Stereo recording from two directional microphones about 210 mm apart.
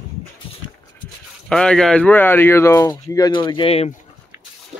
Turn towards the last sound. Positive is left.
turn(degrees=30)  # may be behind; listen again after turning